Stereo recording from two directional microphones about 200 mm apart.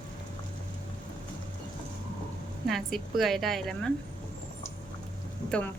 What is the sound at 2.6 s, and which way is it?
A woman's voice, centre (ahead or behind).